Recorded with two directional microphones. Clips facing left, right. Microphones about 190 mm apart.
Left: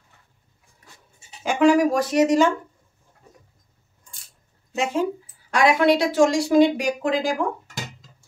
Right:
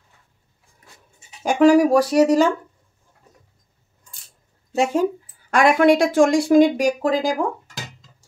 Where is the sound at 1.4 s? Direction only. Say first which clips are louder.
Right 3 dB; 40° right (ahead or behind).